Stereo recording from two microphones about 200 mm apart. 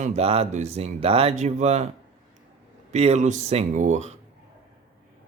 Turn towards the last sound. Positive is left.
turn(degrees=-35)  # may be behind; listen again after turning